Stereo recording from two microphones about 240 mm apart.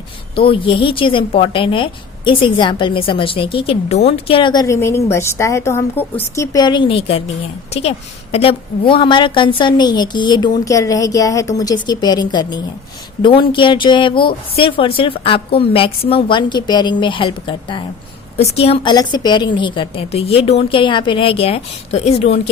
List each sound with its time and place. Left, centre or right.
0.3 s a woman's voice: left